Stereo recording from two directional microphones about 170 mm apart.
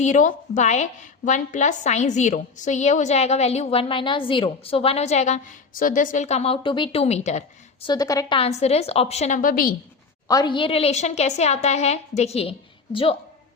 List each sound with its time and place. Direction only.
0.0 s a woman's voice: 45° left (ahead or behind)
7.9 s a woman's voice: 20° left (ahead or behind)
8.4 s a woman's voice: 40° left (ahead or behind); by 9.7 s 55° left (ahead or behind)
10.2 s a woman's voice: 25° left (ahead or behind)